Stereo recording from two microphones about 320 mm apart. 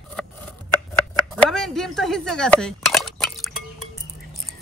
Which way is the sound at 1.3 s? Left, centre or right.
Centre.